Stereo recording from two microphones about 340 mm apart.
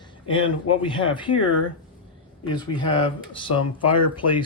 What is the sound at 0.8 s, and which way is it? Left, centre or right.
Speech, centre.